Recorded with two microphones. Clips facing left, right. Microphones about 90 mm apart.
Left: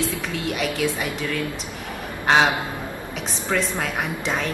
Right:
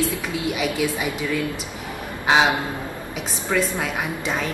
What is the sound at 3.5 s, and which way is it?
A woman's voice, 5° right (ahead or behind).